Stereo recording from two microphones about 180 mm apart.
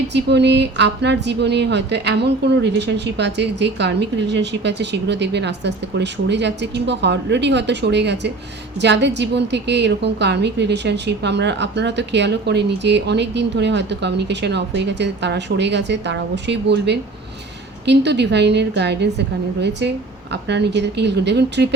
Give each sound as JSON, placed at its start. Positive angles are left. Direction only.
{"t": 0.1, "sound": "a woman's voice", "side_deg": -70}
{"t": 20.3, "sound": "a woman's voice", "side_deg": -70}